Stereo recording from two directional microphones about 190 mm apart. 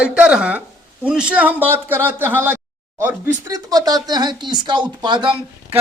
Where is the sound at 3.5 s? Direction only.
20° right (ahead or behind).